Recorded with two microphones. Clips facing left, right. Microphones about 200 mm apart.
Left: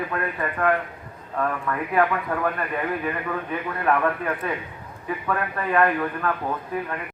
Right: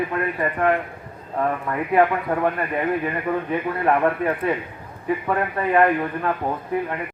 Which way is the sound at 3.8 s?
25° right (ahead or behind).